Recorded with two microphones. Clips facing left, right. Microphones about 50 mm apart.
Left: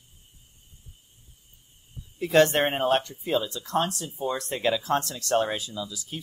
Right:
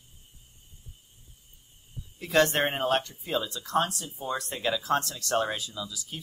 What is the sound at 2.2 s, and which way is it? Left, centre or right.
Speech, left.